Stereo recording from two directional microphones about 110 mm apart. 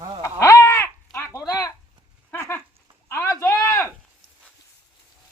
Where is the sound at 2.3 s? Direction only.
20° left (ahead or behind).